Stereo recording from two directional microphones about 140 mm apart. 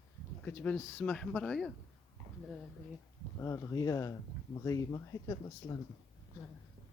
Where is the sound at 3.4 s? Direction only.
20° left (ahead or behind).